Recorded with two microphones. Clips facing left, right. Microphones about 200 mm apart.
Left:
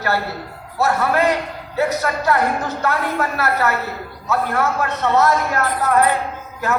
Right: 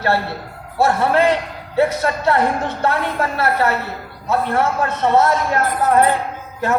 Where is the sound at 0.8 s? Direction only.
30° right (ahead or behind).